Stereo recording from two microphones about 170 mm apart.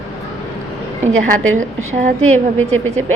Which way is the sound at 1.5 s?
45° right (ahead or behind).